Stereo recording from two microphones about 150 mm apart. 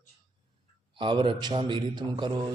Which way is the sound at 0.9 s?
30° right (ahead or behind).